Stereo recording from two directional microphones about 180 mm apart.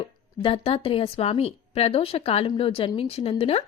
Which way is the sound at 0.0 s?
30° left (ahead or behind).